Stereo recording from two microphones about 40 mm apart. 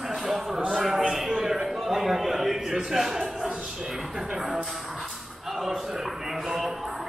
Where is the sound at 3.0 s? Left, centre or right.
Centre.